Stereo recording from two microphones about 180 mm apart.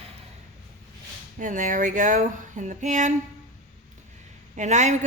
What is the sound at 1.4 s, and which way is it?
Speech, 45° right (ahead or behind).